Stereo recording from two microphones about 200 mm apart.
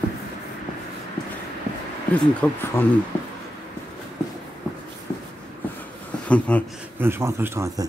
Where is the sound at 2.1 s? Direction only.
10° left (ahead or behind).